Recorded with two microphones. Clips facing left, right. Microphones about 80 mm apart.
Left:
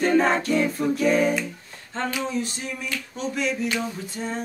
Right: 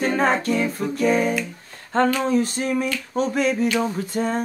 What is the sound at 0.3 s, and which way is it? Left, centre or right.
Singing, centre.